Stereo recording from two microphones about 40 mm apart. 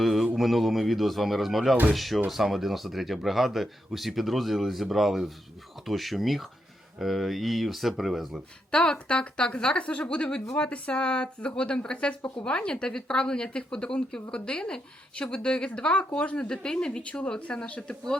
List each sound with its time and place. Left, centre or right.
0.0 s mantra: centre
0.3 s speech: centre
8.7 s speech: left
16.5 s speech: left